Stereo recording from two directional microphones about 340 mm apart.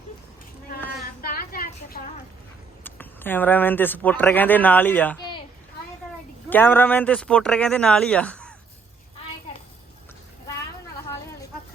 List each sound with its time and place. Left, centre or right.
1.2 s a sound: left
2.8 s speech: centre
6.5 s speech: centre